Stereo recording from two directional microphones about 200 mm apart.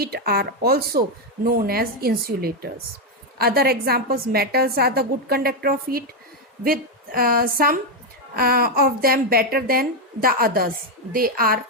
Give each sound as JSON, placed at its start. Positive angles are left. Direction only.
{"t": 0.0, "sound": "a woman's voice", "side_deg": -50}